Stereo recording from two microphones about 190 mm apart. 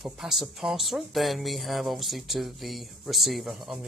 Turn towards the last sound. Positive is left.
turn(degrees=0)  # may be behind; listen again after turning